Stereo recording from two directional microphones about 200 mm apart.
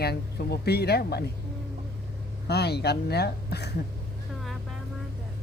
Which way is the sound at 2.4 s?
55° left (ahead or behind).